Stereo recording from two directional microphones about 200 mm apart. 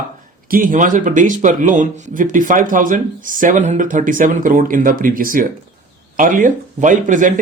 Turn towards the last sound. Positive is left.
turn(degrees=-40)  # may be behind; listen again after turning